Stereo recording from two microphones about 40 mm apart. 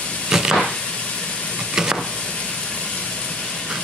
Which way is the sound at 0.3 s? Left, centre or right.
Centre.